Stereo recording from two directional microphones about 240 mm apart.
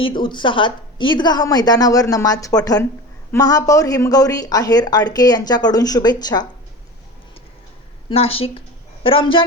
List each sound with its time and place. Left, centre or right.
0.0 s speech: centre
8.1 s speech: left